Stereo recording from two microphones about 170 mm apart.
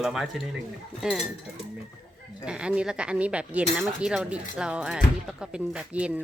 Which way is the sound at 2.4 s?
5° right (ahead or behind).